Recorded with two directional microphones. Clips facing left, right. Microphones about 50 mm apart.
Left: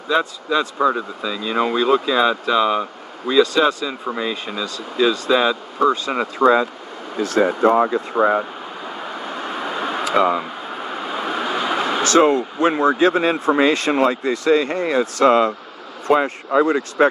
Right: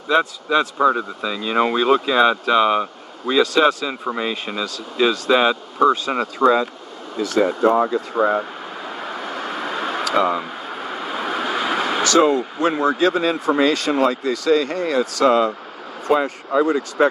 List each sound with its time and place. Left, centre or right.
0.7 s speech: centre
3.6 s speech: centre
4.5 s speech: right
5.8 s speech: centre
6.4 s speech: centre
7.2 s speech: left
7.4 s speech: left
8.8 s vehicle: centre
12.0 s speech: left
15.1 s speech: left